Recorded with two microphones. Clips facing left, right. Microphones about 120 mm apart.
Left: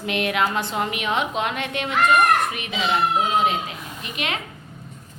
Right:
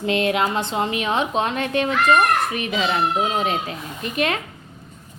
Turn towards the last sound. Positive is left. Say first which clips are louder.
# right 6 dB
turn(degrees=-40)  # may be behind; listen again after turning